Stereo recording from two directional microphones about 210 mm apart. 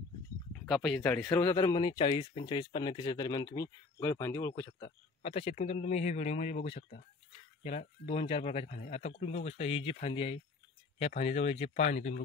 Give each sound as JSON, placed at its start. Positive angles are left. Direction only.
{"t": 0.5, "sound": "speech", "side_deg": 0}
{"t": 5.2, "sound": "speech", "side_deg": 30}